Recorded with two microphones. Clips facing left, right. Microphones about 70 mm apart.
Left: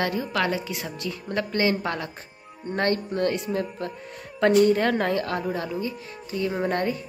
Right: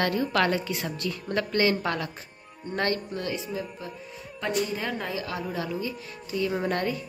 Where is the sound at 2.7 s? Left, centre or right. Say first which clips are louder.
Left 3 dB; left.